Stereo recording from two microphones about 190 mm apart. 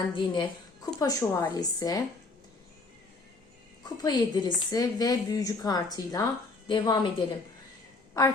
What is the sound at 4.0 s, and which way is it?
A woman's voice, 20° left (ahead or behind).